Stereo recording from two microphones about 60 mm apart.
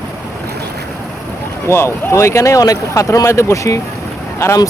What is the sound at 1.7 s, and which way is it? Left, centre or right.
Speech, left.